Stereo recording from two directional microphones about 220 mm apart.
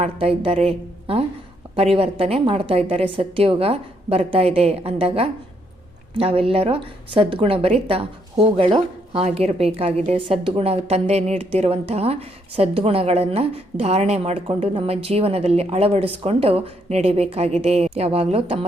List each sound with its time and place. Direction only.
0.0 s a woman's voice: 25° right (ahead or behind)